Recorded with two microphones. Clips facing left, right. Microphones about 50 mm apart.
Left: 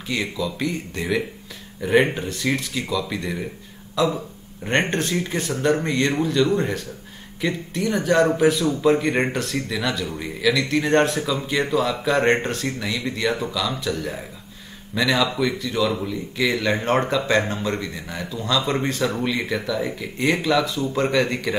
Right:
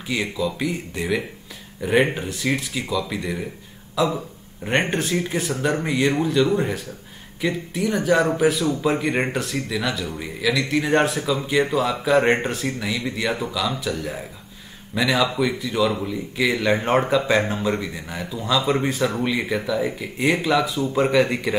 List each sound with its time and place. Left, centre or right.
0.1 s speech: centre